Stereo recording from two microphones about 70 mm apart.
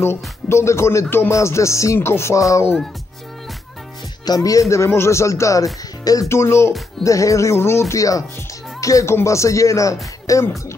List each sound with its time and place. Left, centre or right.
0.0 s speech: left
4.4 s speech: left
6.2 s speech: left
7.0 s speech: left
7.9 s speech: left